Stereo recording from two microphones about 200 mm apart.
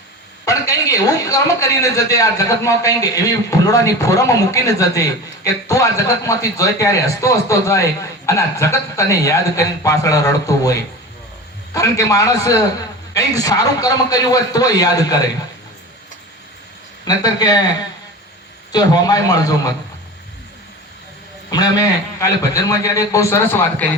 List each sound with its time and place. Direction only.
0.4 s a man's voice: 15° left (ahead or behind)
17.1 s a man's voice: 20° left (ahead or behind)
18.7 s a man's voice: 20° left (ahead or behind)
21.5 s a man's voice: 20° left (ahead or behind)